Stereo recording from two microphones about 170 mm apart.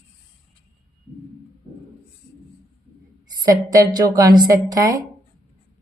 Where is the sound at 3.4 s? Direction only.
20° right (ahead or behind).